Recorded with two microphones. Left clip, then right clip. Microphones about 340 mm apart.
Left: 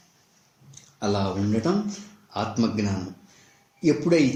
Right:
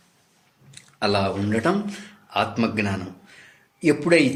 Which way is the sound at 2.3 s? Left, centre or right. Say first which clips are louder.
Right 4 dB; right.